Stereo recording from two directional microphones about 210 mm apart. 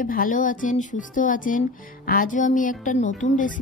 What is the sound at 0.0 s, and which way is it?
Speech, 40° left (ahead or behind).